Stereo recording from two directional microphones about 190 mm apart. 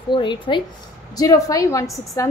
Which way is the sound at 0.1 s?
25° left (ahead or behind).